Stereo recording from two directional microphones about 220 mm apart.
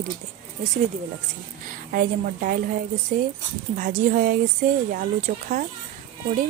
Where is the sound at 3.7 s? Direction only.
40° right (ahead or behind).